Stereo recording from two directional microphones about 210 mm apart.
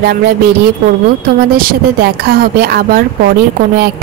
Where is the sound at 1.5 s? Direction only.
45° right (ahead or behind).